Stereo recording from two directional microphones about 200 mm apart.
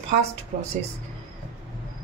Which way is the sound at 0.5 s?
35° right (ahead or behind).